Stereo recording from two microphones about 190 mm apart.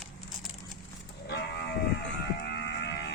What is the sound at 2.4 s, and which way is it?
Moo, 60° left (ahead or behind).